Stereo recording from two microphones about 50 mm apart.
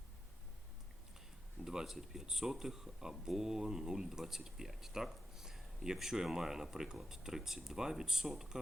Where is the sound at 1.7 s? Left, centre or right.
Centre.